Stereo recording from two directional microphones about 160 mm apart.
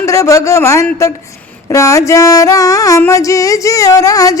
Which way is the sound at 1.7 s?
20° left (ahead or behind).